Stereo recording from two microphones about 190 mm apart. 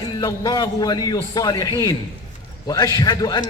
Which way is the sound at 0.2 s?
20° left (ahead or behind).